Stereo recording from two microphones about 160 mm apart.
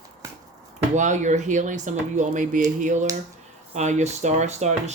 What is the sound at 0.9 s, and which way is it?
Speech, 50° right (ahead or behind).